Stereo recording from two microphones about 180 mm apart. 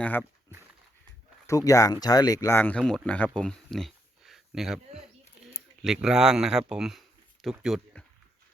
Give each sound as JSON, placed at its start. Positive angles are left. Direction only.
{"t": 0.0, "sound": "speech", "side_deg": 10}
{"t": 1.5, "sound": "speech", "side_deg": 20}
{"t": 3.3, "sound": "a sound", "side_deg": 5}
{"t": 5.8, "sound": "speech", "side_deg": -5}